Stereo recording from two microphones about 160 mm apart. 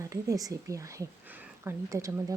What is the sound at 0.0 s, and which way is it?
Speech, 20° right (ahead or behind).